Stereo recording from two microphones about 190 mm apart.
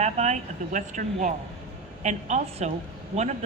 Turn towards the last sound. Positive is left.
turn(degrees=-35)  # may be behind; listen again after turning